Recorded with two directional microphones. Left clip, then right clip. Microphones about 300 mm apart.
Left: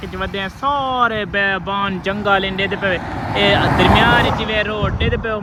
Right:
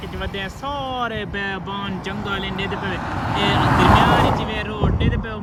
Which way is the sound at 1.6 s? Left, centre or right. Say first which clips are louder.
Left 8 dB; centre.